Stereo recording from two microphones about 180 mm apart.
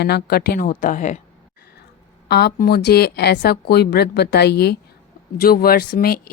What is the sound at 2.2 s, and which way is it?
Speech, 65° left (ahead or behind).